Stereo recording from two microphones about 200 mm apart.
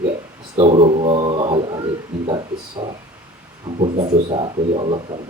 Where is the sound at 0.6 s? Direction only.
25° right (ahead or behind).